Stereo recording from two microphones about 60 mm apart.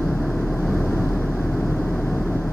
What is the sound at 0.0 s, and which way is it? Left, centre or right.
Vehicle, centre.